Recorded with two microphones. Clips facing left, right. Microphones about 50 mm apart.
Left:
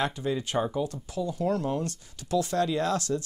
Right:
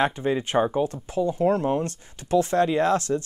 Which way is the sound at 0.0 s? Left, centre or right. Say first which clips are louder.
Right 5 dB; right.